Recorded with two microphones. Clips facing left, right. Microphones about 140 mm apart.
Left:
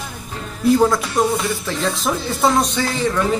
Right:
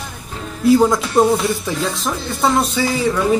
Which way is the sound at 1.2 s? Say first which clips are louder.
Right 5 dB; 30° right (ahead or behind).